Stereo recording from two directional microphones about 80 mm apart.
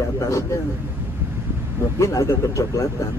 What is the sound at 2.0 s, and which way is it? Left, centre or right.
Speech, left.